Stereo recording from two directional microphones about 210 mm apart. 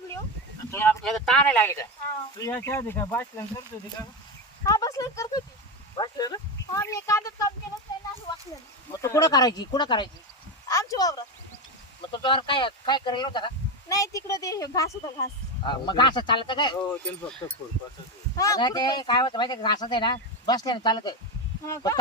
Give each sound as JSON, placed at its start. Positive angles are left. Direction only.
{"t": 1.0, "sound": "speech", "side_deg": 0}
{"t": 4.6, "sound": "speech", "side_deg": 15}
{"t": 8.9, "sound": "speech", "side_deg": 15}
{"t": 10.7, "sound": "a sound", "side_deg": 15}
{"t": 12.0, "sound": "speech", "side_deg": 20}
{"t": 16.9, "sound": "speech", "side_deg": 5}